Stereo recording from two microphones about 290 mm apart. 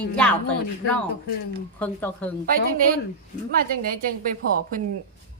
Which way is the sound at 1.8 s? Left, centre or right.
Centre.